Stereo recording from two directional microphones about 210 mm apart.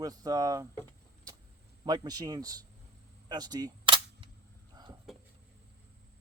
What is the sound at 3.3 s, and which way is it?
Cap gun, 20° right (ahead or behind).